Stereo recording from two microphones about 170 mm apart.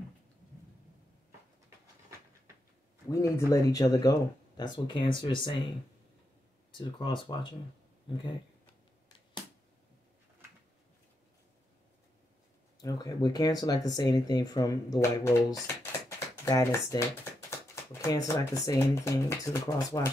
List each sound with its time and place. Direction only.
3.1 s speech: 15° left (ahead or behind)
6.7 s speech: 30° left (ahead or behind)
12.8 s speech: 20° left (ahead or behind)